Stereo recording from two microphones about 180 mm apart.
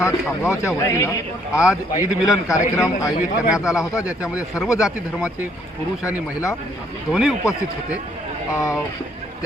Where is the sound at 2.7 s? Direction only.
20° left (ahead or behind).